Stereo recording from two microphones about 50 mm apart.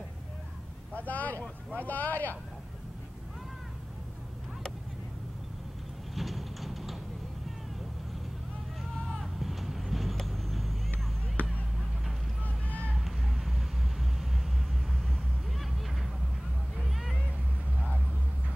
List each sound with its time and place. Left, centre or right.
0.9 s speech: left
6.1 s a sound: centre
9.2 s vehicle: centre
11.4 s a sound: left
12.6 s vehicle: left
12.9 s vehicle: centre